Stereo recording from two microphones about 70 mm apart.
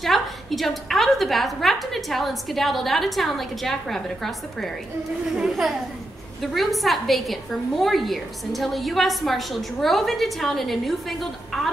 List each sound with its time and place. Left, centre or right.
0.0 s a woman's voice: centre